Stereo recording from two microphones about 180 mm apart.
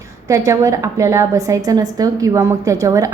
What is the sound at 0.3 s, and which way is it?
A woman's voice, 15° right (ahead or behind).